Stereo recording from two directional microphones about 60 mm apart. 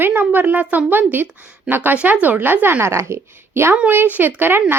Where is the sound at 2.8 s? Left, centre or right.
Right.